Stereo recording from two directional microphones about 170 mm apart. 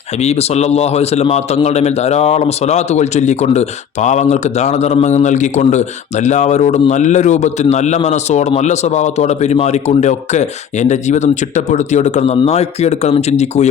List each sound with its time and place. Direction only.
0.2 s a man's voice: 40° left (ahead or behind)